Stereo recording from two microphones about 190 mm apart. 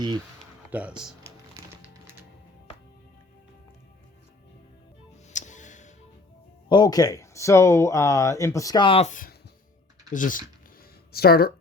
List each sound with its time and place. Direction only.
0.7 s speech: 5° right (ahead or behind)
1.2 s music: 15° right (ahead or behind)
5.3 s music: 40° left (ahead or behind)
6.7 s speech: 20° left (ahead or behind); by 9.3 s 40° left (ahead or behind)
10.1 s a sound: 45° left (ahead or behind)